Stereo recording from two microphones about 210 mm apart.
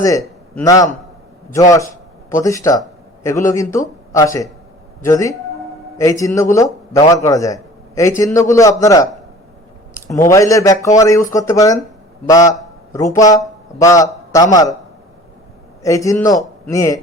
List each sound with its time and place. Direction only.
0.0 s a man's voice: 15° left (ahead or behind)
12.9 s a man's voice: 15° left (ahead or behind)
15.8 s speech: 15° left (ahead or behind)